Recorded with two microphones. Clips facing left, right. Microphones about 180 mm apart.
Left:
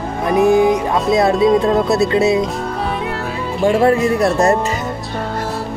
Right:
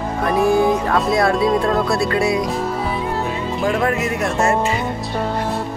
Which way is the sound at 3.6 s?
30° left (ahead or behind).